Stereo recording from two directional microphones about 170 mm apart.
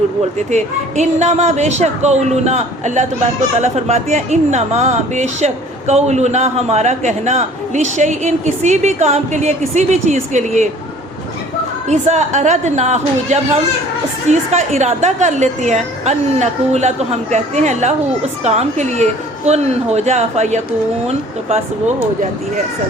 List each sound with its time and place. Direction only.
0.5 s a woman's voice: 40° right (ahead or behind)
11.9 s a man's voice: 45° right (ahead or behind)